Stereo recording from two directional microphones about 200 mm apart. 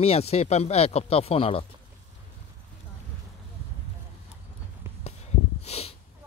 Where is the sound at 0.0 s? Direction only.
30° left (ahead or behind).